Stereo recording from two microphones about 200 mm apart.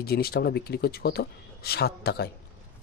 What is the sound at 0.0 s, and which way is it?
Speech, 50° left (ahead or behind).